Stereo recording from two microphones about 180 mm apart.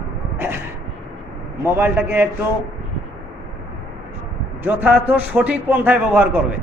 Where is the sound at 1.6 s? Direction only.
10° right (ahead or behind).